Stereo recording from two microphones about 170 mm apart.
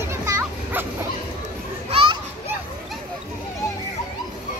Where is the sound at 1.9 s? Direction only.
30° right (ahead or behind).